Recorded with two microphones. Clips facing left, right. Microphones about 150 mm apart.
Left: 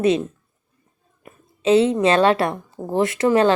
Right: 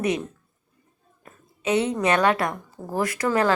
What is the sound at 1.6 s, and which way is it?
Speech, 25° left (ahead or behind).